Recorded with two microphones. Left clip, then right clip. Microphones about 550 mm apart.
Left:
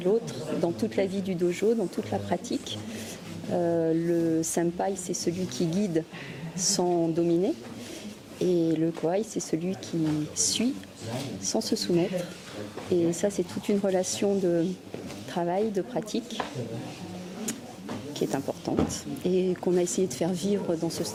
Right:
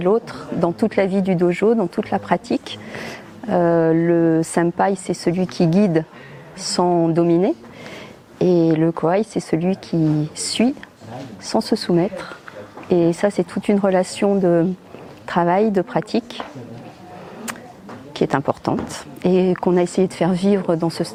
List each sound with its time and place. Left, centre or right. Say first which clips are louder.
0.0 s a woman's voice: right 8 dB; right
3.5 s a woman's voice: right 10 dB; right
8.4 s a woman's voice: right 9 dB; right
12.9 s a woman's voice: right 9 dB; right
18.1 s a woman's voice: right 11 dB; right